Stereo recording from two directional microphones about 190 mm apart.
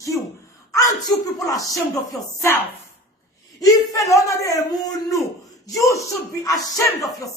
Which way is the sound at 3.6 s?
15° left (ahead or behind).